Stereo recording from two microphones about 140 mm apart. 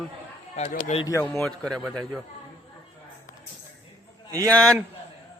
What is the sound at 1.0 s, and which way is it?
Speech, 25° left (ahead or behind).